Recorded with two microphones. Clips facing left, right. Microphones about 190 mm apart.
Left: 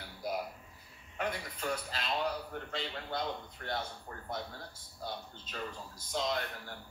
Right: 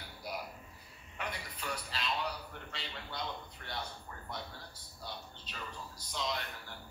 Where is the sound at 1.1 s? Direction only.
45° left (ahead or behind).